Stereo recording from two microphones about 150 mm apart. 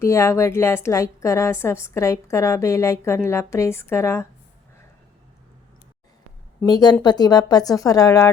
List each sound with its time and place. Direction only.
0.0 s a woman's voice: 20° left (ahead or behind)
6.7 s a woman's voice: 25° left (ahead or behind)